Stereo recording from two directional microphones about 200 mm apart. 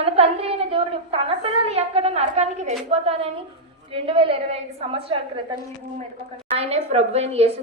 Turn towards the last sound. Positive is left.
turn(degrees=-30)  # may be behind; listen again after turning